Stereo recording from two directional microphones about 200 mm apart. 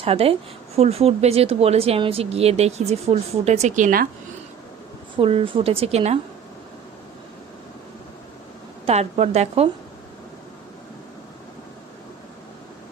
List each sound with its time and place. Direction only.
0.0 s a woman's voice: 30° right (ahead or behind)
5.1 s a woman's voice: 25° right (ahead or behind)
8.9 s speech: 30° right (ahead or behind)